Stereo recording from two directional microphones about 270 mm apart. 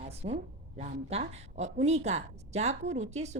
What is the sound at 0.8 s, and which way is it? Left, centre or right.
A woman's voice, right.